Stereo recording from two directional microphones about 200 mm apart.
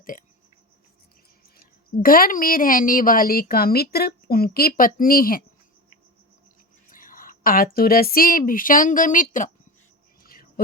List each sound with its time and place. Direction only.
0.0 s hiccup: 40° left (ahead or behind)
1.5 s speech: 45° left (ahead or behind)
6.8 s speech: 45° left (ahead or behind)
10.2 s a sound: 45° left (ahead or behind)